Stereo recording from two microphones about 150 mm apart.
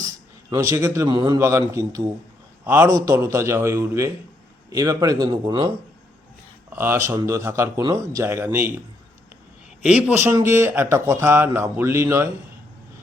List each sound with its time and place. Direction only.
0.5 s a man's voice: 20° right (ahead or behind)
6.7 s a man's voice: 15° right (ahead or behind)
9.8 s speech: 10° right (ahead or behind)